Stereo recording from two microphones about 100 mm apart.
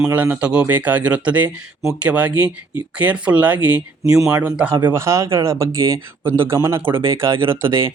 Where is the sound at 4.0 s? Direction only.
35° right (ahead or behind).